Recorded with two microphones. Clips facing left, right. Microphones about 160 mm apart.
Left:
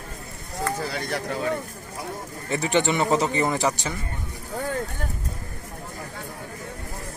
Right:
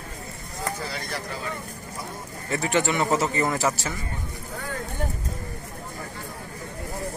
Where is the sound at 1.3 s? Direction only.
65° left (ahead or behind).